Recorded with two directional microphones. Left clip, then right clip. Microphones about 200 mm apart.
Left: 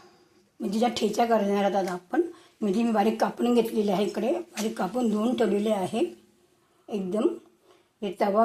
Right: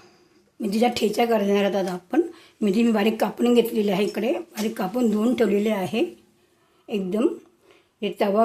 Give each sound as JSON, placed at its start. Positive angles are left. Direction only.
{"t": 0.6, "sound": "a woman's voice", "side_deg": -20}